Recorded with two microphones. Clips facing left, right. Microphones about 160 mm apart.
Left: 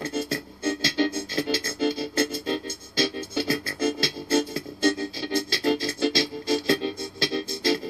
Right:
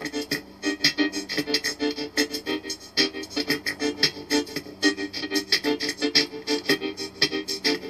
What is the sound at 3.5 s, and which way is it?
Music, 20° left (ahead or behind).